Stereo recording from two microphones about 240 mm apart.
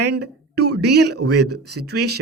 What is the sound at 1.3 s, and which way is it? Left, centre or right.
Speech, right.